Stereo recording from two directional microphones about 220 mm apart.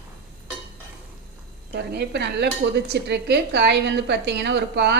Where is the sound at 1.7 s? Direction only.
50° right (ahead or behind).